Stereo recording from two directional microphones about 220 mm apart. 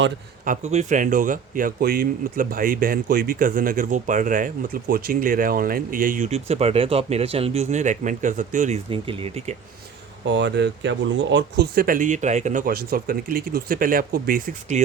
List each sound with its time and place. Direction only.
0.4 s speech: 35° right (ahead or behind)
10.3 s speech: 50° right (ahead or behind)